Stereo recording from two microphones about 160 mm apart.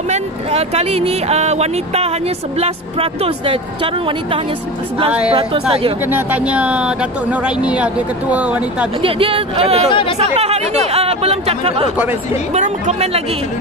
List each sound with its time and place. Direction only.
0.1 s speech: 40° right (ahead or behind)
6.0 s speech: 10° right (ahead or behind)
9.0 s speech: 35° right (ahead or behind)